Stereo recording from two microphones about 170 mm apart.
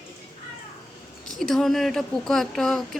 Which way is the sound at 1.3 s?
5° left (ahead or behind).